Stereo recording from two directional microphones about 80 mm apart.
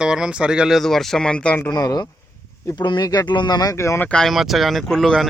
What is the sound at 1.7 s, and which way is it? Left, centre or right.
Speech, left.